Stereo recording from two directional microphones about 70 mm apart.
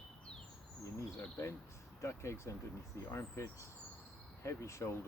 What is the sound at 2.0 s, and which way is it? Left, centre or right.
Speech, left.